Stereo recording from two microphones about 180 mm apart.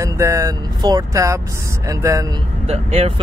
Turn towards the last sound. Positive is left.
turn(degrees=-35)  # may be behind; listen again after turning